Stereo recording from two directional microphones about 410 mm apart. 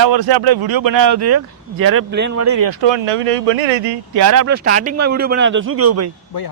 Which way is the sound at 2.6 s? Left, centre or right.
Right.